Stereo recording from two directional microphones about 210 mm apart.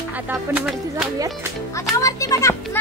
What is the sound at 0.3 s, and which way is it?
Speech, 5° right (ahead or behind).